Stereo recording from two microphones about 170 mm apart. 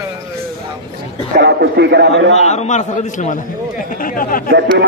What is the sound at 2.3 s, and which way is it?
A man's voice, 40° left (ahead or behind).